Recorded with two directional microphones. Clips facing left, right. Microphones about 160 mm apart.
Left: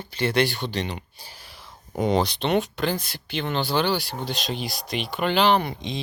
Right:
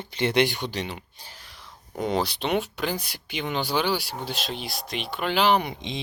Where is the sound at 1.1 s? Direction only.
10° left (ahead or behind).